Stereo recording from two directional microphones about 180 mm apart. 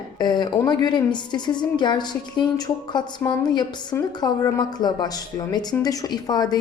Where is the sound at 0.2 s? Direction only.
25° left (ahead or behind).